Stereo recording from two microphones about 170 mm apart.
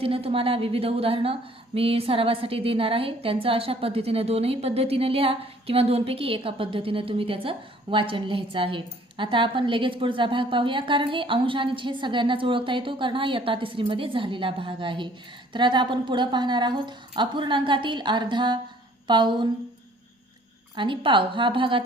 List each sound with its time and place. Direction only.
0.0 s a woman's voice: 35° right (ahead or behind)
20.7 s a woman's voice: 30° right (ahead or behind)